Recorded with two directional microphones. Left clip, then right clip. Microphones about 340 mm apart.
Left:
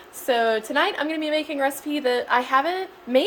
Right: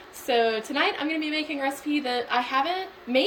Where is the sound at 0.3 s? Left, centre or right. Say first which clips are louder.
Left 2 dB; centre.